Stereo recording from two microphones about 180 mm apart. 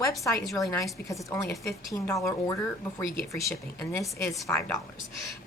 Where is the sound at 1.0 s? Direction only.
15° left (ahead or behind).